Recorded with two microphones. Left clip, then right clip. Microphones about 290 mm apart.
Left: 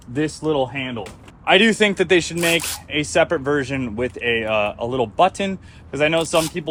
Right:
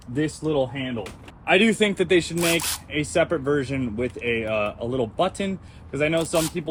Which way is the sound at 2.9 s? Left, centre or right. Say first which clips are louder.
Left 5 dB; left.